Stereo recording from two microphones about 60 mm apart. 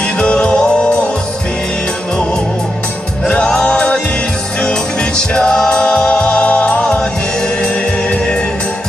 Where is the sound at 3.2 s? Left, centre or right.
Left.